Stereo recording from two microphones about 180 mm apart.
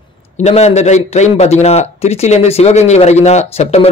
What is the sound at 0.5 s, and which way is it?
A man's voice, 35° left (ahead or behind).